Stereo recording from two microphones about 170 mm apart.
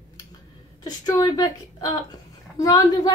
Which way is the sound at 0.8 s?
20° left (ahead or behind).